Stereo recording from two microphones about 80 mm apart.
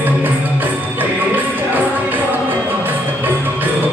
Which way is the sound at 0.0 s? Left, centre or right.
Right.